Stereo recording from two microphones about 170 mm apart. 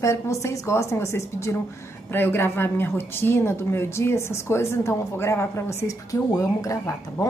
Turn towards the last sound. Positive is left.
turn(degrees=20)  # may be behind; listen again after turning